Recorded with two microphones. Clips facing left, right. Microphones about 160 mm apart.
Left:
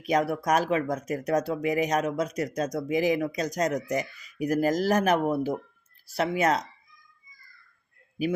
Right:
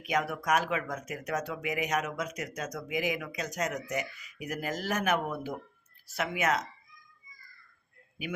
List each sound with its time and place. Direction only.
0.0 s speech: 35° left (ahead or behind)